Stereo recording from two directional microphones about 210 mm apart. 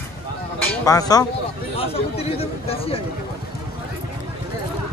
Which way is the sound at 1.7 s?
30° left (ahead or behind).